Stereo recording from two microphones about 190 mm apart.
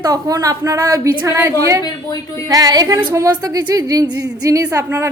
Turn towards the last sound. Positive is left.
turn(degrees=-15)  # may be behind; listen again after turning